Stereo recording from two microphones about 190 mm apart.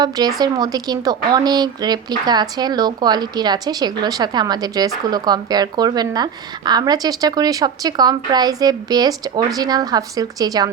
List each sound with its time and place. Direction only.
0.0 s a woman's voice: 20° right (ahead or behind)